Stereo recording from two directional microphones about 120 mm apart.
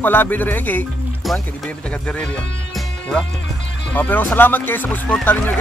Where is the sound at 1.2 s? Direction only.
5° left (ahead or behind).